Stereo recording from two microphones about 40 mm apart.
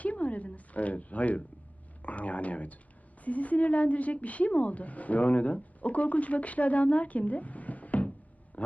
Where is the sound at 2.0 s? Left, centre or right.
Left.